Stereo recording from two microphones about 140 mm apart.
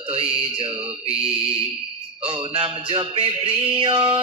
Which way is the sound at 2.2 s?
40° right (ahead or behind).